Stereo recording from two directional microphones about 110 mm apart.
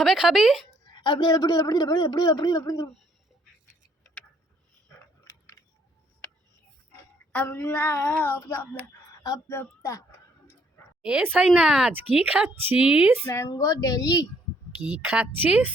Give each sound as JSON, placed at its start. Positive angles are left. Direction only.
{"t": 0.0, "sound": "a woman's voice", "side_deg": 0}
{"t": 0.9, "sound": "a man's voice", "side_deg": 45}
{"t": 5.2, "sound": "keys jangling", "side_deg": 25}
{"t": 7.3, "sound": "speech", "side_deg": 15}
{"t": 8.9, "sound": "speech", "side_deg": 30}
{"t": 11.0, "sound": "speech", "side_deg": -10}
{"t": 13.2, "sound": "a man's voice", "side_deg": 30}
{"t": 15.4, "sound": "speech", "side_deg": -15}